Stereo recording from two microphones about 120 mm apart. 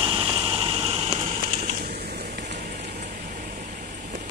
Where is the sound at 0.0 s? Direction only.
40° right (ahead or behind); by 1.8 s 70° right (ahead or behind).